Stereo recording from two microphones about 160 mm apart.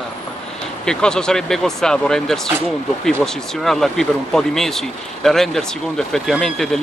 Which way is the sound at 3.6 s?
Centre (ahead or behind).